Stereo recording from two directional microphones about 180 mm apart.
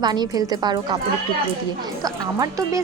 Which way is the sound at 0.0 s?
25° right (ahead or behind).